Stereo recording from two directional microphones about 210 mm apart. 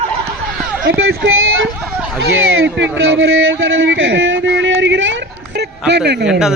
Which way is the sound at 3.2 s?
65° right (ahead or behind).